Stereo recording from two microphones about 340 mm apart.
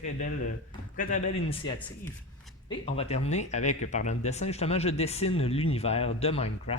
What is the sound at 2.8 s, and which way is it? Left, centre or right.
Speech, centre.